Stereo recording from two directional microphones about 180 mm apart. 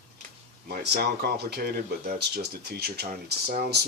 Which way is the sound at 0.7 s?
60° right (ahead or behind).